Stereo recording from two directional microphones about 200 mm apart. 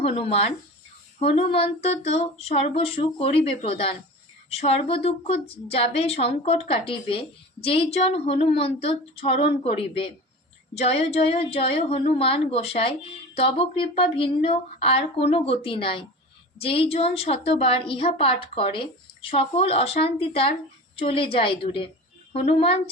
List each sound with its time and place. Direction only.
0.0 s a woman's voice: 30° left (ahead or behind)